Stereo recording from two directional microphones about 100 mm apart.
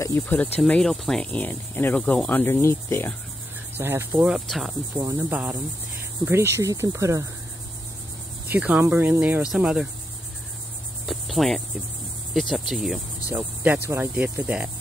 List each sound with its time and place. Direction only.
0.2 s speech: 15° left (ahead or behind)
0.7 s speech: 5° left (ahead or behind)
2.2 s cricket: 20° left (ahead or behind)
3.7 s cricket: 20° right (ahead or behind)
4.5 s cricket: centre (ahead or behind)
5.3 s speech: 10° right (ahead or behind)
6.2 s cricket: 25° right (ahead or behind)
6.7 s speech: 30° right (ahead or behind)
8.5 s cricket: 15° right (ahead or behind)
9.4 s speech: 10° right (ahead or behind)
11.1 s cricket: centre (ahead or behind)
13.3 s cricket: 20° right (ahead or behind)